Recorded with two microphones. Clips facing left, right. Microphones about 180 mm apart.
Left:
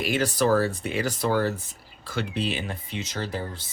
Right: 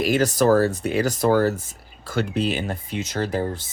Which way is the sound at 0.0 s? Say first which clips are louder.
Right 5 dB; 40° right (ahead or behind).